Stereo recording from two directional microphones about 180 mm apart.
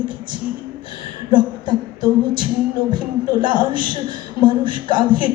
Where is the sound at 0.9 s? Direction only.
25° right (ahead or behind).